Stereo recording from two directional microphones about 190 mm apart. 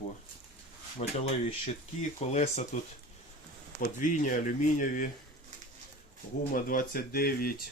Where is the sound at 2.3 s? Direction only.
35° left (ahead or behind).